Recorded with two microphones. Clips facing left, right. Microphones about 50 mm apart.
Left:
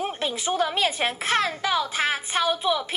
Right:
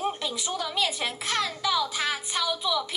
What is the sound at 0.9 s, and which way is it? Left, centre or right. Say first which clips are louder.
Speech: left 5 dB; centre.